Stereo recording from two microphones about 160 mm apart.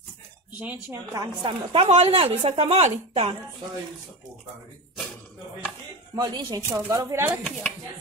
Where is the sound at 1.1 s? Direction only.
25° right (ahead or behind); by 3.3 s 45° right (ahead or behind).